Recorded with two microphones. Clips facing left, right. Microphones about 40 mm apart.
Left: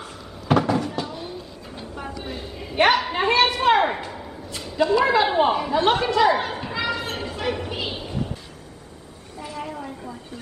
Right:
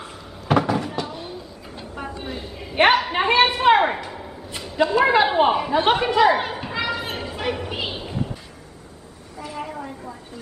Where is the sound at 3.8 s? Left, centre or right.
Centre.